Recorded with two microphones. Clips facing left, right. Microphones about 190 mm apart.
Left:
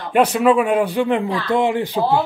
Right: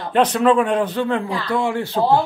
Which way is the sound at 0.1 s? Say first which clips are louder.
Left 1 dB; 10° left (ahead or behind).